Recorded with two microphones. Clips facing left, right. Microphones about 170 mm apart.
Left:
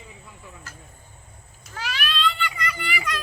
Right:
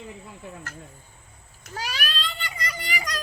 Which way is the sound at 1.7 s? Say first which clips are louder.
Left 1 dB; 40° right (ahead or behind).